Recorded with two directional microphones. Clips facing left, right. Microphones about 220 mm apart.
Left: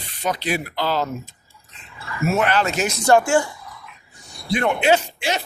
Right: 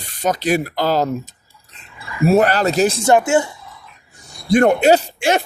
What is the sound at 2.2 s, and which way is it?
Speech, 40° right (ahead or behind).